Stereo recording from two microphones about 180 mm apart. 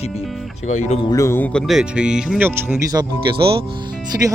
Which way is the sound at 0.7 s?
40° left (ahead or behind).